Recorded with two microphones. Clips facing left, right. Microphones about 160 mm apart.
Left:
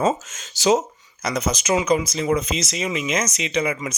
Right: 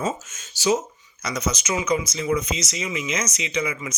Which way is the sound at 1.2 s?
60° left (ahead or behind).